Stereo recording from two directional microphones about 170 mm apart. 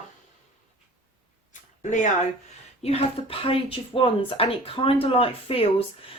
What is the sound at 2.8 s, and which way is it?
Speech, 35° left (ahead or behind).